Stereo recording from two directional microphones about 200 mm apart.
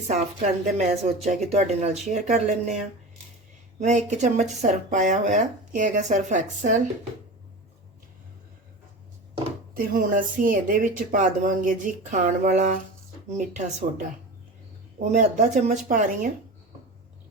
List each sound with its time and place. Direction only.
0.6 s speech: 35° right (ahead or behind)
3.8 s speech: 35° right (ahead or behind)
9.7 s speech: 45° right (ahead or behind)
14.9 s speech: 40° right (ahead or behind)